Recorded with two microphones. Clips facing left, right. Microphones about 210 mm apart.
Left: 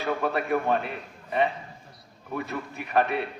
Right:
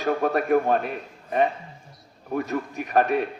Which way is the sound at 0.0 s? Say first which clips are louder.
Right 4 dB; 40° right (ahead or behind).